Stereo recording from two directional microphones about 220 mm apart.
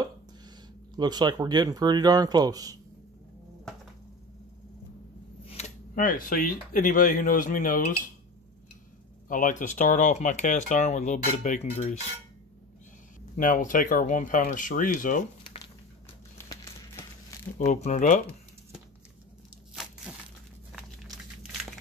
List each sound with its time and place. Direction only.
0.9 s speech: 20° right (ahead or behind)
5.5 s speech: 35° left (ahead or behind)
9.3 s speech: 35° left (ahead or behind)
13.4 s speech: 35° left (ahead or behind)
15.4 s a sound: 20° left (ahead or behind)
16.3 s crumpling: 15° left (ahead or behind)
17.7 s speech: 30° left (ahead or behind)